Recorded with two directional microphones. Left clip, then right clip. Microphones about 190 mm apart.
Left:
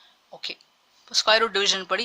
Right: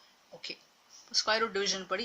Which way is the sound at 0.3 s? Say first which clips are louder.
Left 10 dB; 35° left (ahead or behind).